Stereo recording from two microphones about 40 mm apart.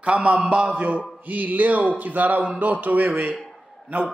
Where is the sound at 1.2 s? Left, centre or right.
Right.